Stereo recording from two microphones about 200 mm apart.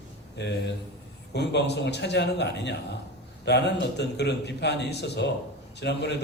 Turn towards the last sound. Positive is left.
turn(degrees=60)  # may be behind; listen again after turning